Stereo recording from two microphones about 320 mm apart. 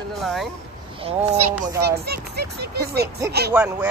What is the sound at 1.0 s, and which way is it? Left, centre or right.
Speech, centre.